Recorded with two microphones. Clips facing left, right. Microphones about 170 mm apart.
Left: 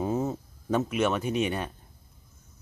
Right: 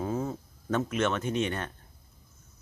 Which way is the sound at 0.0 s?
20° left (ahead or behind).